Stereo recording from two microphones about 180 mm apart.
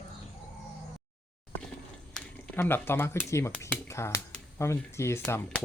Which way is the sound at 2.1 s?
10° left (ahead or behind).